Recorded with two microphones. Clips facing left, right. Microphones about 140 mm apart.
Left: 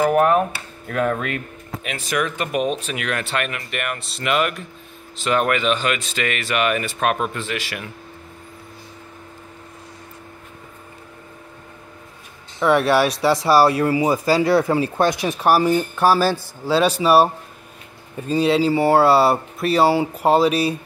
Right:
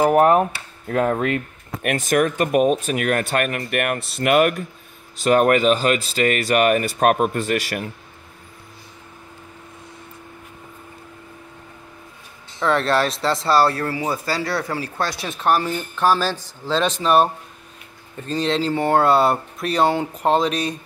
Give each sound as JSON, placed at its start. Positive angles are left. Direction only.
{"t": 0.0, "sound": "speech", "side_deg": -25}
{"t": 1.8, "sound": "speech", "side_deg": -50}
{"t": 12.5, "sound": "speech", "side_deg": 10}